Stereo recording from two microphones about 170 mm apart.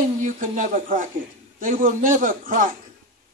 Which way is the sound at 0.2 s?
50° right (ahead or behind).